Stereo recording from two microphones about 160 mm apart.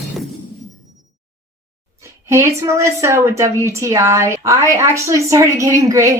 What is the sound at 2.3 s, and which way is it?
A woman's voice, 20° right (ahead or behind).